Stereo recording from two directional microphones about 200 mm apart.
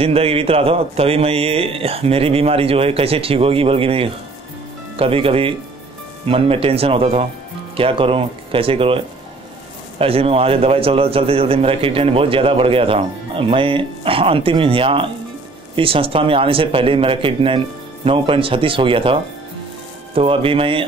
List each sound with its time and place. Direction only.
0.0 s speech: 30° right (ahead or behind)
20.2 s speech: 25° right (ahead or behind)